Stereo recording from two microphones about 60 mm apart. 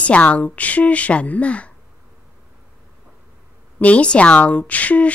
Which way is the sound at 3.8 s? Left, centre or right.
Left.